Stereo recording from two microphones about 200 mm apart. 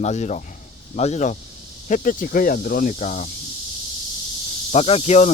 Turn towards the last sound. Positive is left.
turn(degrees=35)  # may be behind; listen again after turning